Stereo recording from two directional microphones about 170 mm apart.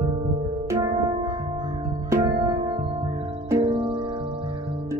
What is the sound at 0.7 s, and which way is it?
Music, 20° right (ahead or behind).